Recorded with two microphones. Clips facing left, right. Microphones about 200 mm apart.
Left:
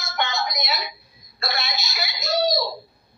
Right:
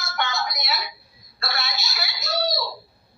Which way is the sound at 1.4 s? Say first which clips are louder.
Left 2 dB; 20° left (ahead or behind).